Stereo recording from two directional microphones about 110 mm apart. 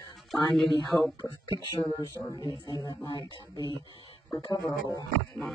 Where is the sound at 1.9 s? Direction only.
30° left (ahead or behind).